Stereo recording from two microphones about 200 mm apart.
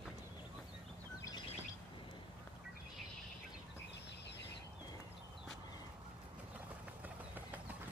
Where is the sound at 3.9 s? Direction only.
60° left (ahead or behind).